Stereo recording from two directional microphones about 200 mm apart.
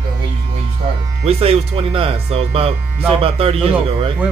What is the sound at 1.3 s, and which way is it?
Speech, 30° right (ahead or behind).